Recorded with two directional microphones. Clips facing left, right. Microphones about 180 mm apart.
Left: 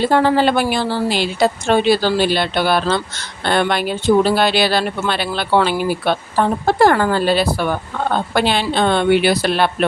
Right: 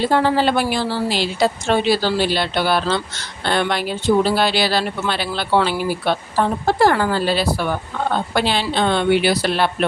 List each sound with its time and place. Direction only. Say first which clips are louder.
0.1 s a woman's voice: left 2 dB; 55° left (ahead or behind)